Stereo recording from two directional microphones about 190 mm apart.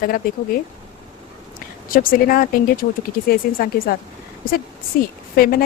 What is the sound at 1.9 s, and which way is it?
Speech, 45° left (ahead or behind).